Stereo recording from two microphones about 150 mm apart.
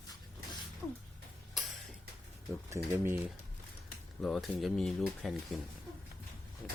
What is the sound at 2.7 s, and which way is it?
Speech, 15° right (ahead or behind).